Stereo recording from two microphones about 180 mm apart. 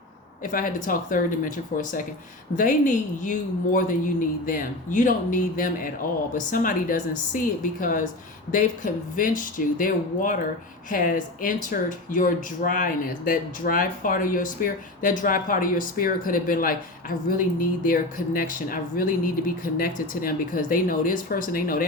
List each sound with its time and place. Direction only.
0.4 s speech: 50° left (ahead or behind)